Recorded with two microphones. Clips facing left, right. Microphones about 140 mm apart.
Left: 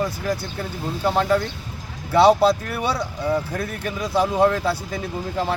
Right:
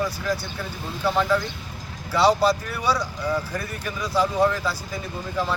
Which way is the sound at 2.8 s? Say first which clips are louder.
Left 1 dB; 25° left (ahead or behind).